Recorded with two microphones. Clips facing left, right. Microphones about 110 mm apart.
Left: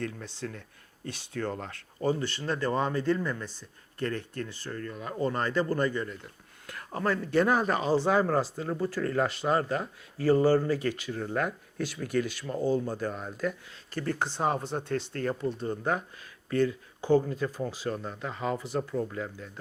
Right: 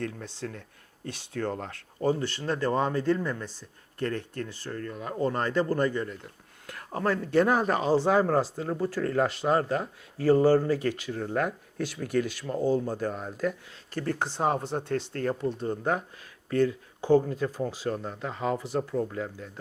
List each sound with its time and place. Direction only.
0.0 s speech: 45° right (ahead or behind)
11.2 s speech: 40° right (ahead or behind)
12.8 s speech: 40° right (ahead or behind)
15.4 s speech: 30° right (ahead or behind)
16.1 s speech: 50° right (ahead or behind)